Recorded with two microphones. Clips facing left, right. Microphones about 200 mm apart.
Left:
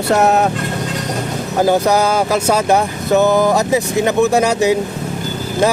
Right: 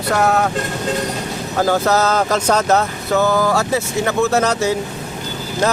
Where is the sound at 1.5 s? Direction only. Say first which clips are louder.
Left 3 dB; 15° left (ahead or behind).